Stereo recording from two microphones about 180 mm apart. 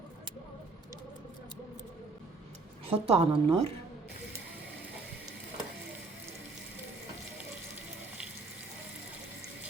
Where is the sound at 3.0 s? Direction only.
35° right (ahead or behind).